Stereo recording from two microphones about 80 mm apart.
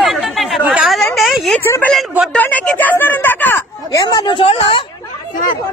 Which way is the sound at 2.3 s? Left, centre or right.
Centre.